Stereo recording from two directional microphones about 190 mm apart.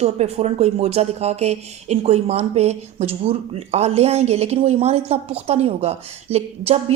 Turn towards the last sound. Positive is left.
turn(degrees=-30)  # may be behind; listen again after turning